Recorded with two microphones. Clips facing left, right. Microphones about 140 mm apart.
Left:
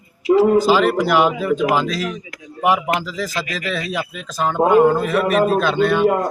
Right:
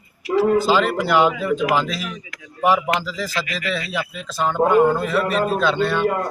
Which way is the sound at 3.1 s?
15° left (ahead or behind).